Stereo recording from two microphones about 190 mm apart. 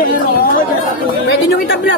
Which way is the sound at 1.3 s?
60° left (ahead or behind).